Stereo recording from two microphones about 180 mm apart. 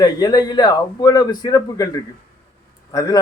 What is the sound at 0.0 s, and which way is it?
Speech, 20° left (ahead or behind).